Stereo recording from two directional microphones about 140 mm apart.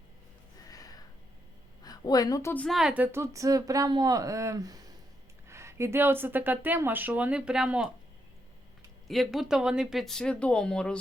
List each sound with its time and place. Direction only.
0.6 s a sound: 25° left (ahead or behind)
1.8 s a woman's voice: 30° left (ahead or behind)
2.6 s speech: centre (ahead or behind)
9.0 s speech: centre (ahead or behind)